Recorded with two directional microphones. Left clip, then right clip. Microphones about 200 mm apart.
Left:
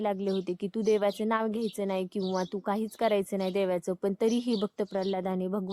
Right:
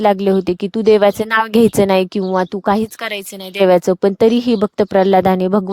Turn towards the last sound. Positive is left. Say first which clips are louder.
# right 18 dB
turn(degrees=-50)  # may be behind; listen again after turning